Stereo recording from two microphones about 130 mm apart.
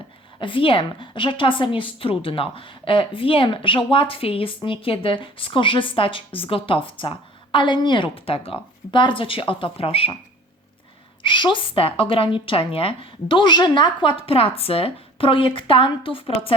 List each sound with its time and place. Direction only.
0.3 s a woman's voice: 40° left (ahead or behind)
11.2 s speech: 40° left (ahead or behind)